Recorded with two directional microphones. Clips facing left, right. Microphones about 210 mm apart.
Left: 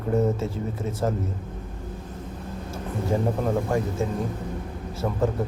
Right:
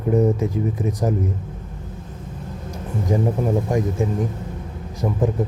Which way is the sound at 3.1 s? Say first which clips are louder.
Right 4 dB; 15° right (ahead or behind).